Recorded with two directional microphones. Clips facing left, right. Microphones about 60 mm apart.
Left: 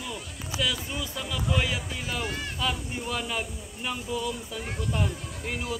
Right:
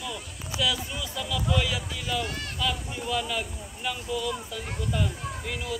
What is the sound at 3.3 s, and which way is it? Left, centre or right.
Speech, left.